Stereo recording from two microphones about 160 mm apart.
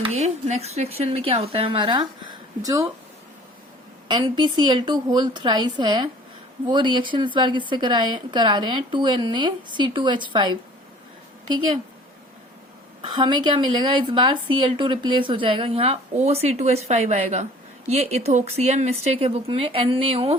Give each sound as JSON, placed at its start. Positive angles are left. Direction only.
{"t": 0.0, "sound": "speech", "side_deg": -45}
{"t": 4.1, "sound": "a woman's voice", "side_deg": -30}
{"t": 13.0, "sound": "speech", "side_deg": -30}